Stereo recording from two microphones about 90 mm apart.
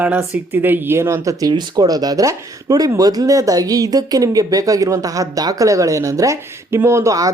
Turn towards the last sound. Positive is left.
turn(degrees=-35)  # may be behind; listen again after turning